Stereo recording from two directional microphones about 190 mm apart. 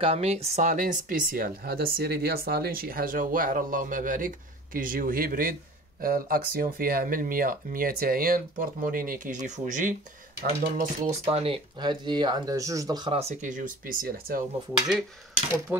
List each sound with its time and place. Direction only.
0.0 s speech: 30° right (ahead or behind)
11.2 s speech: 30° right (ahead or behind); by 14.4 s 50° right (ahead or behind)
15.7 s speech: 10° right (ahead or behind)